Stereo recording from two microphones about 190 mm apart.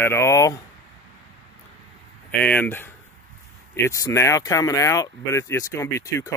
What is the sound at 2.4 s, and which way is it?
Speech, 10° left (ahead or behind).